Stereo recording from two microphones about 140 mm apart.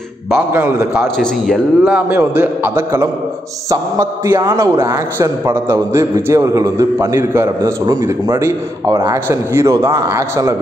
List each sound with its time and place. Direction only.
0.5 s a man's voice: 15° right (ahead or behind)
1.0 s a man's voice: 5° left (ahead or behind)
2.0 s a man's voice: 10° right (ahead or behind)